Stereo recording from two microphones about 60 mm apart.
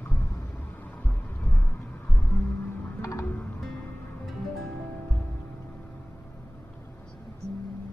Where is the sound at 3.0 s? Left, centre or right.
Left.